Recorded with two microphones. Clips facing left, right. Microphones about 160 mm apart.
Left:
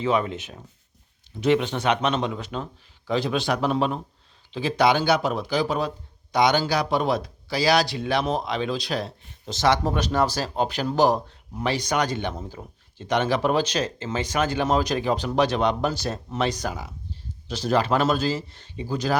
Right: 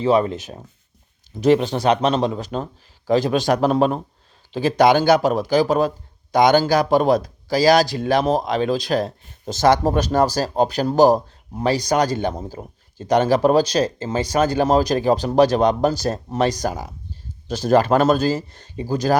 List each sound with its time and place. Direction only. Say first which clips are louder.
0.0 s speech: right 6 dB; 35° right (ahead or behind)